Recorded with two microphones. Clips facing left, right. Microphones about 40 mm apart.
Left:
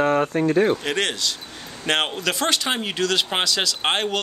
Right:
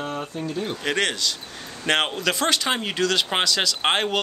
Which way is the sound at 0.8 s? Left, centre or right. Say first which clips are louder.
Even; centre.